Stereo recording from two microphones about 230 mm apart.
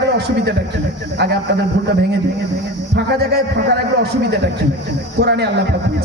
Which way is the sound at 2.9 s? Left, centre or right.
Right.